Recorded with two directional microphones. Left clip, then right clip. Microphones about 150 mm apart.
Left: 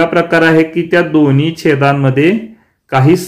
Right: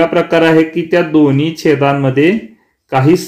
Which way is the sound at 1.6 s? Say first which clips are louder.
Even; 15° right (ahead or behind).